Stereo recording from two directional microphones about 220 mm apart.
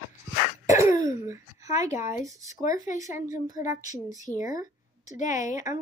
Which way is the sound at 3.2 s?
35° left (ahead or behind).